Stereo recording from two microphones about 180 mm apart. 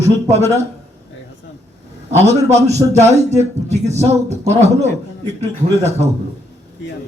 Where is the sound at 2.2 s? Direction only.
40° right (ahead or behind).